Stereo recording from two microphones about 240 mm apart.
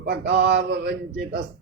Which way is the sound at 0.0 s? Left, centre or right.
Right.